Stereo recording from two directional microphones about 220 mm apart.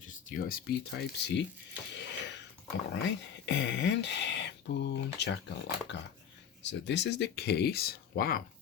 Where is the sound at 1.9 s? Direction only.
50° left (ahead or behind).